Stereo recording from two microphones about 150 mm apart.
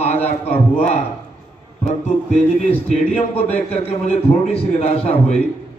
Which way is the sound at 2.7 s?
40° left (ahead or behind).